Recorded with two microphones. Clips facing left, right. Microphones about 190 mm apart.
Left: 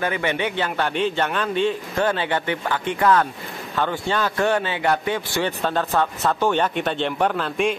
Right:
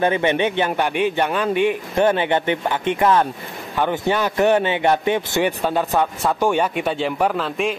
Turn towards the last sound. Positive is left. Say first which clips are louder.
# right 1 dB
turn(degrees=0)  # may be behind; listen again after turning